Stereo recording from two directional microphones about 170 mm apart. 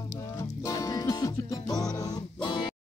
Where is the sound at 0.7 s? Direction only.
20° left (ahead or behind).